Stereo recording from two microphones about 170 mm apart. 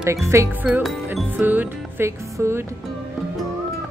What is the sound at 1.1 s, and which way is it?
Speech, 10° right (ahead or behind).